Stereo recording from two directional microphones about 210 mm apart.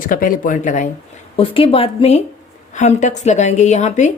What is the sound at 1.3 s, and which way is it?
A woman's voice, 25° left (ahead or behind).